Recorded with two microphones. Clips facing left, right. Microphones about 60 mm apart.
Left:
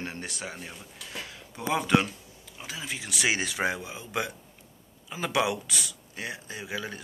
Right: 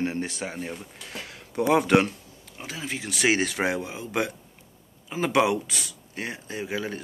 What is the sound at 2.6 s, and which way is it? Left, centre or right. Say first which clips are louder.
Speech: right 3 dB; right.